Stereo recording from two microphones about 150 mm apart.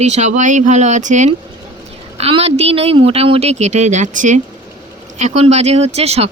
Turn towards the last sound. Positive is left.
turn(degrees=-45)  # may be behind; listen again after turning